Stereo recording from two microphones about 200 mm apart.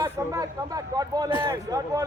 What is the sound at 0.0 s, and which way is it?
A man's voice, 15° right (ahead or behind).